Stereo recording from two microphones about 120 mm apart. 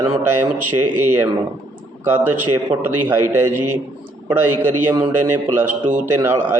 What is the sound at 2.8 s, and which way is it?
A man's voice, 20° right (ahead or behind).